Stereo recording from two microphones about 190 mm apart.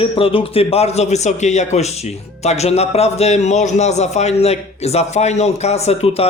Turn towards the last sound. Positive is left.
turn(degrees=30)  # may be behind; listen again after turning